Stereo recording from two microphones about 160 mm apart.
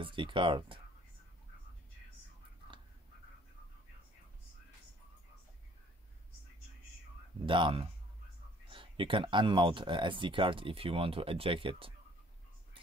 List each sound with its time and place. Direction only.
0.0 s speech: 30° right (ahead or behind)
7.4 s speech: 30° right (ahead or behind)